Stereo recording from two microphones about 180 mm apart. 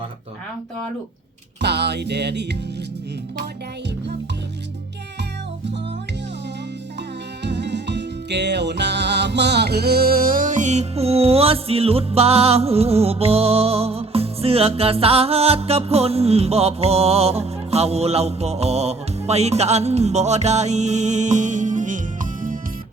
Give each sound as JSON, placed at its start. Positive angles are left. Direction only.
{"t": 1.6, "sound": "music", "side_deg": -70}
{"t": 7.4, "sound": "music", "side_deg": -70}